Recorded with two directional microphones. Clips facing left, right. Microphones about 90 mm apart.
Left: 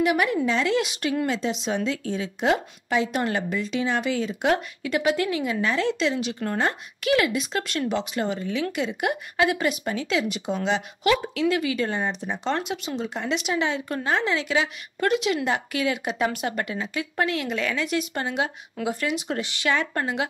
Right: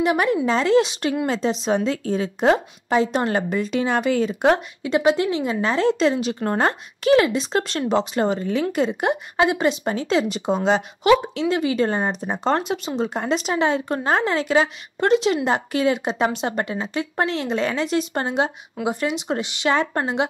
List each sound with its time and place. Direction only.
0.0 s a woman's voice: 35° right (ahead or behind)
4.6 s speech: 25° right (ahead or behind)
9.1 s speech: 25° right (ahead or behind); by 10.8 s 40° right (ahead or behind)
11.1 s speech: 25° right (ahead or behind)
18.8 s speech: 20° right (ahead or behind)